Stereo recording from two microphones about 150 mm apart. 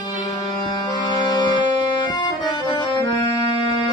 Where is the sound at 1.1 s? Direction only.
25° left (ahead or behind).